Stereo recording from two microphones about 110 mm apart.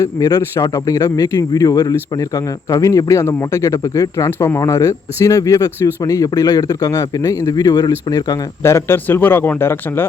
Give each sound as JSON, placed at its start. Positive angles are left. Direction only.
{"t": 0.0, "sound": "speech", "side_deg": 30}
{"t": 8.6, "sound": "a man's voice", "side_deg": 20}